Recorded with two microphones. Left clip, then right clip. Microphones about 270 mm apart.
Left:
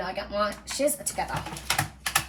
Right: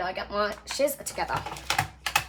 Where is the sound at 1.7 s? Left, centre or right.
Right.